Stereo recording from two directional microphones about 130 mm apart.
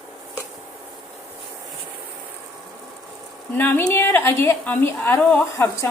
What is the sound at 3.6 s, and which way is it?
A woman's voice, 15° left (ahead or behind).